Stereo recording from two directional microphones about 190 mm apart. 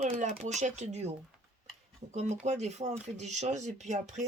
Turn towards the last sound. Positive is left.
turn(degrees=-40)  # may be behind; listen again after turning